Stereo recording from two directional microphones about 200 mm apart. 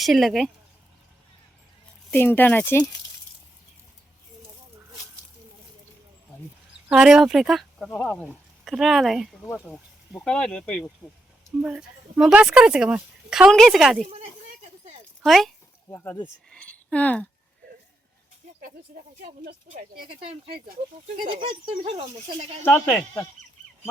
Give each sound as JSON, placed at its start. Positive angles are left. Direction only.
{"t": 0.0, "sound": "speech", "side_deg": 0}
{"t": 2.0, "sound": "speech", "side_deg": 10}
{"t": 6.8, "sound": "speech", "side_deg": -5}
{"t": 14.0, "sound": "a sound", "side_deg": -35}
{"t": 15.2, "sound": "speech", "side_deg": 0}
{"t": 15.9, "sound": "speech", "side_deg": 10}
{"t": 16.5, "sound": "a sound", "side_deg": 5}
{"t": 21.2, "sound": "speech", "side_deg": -25}
{"t": 22.6, "sound": "speech", "side_deg": 10}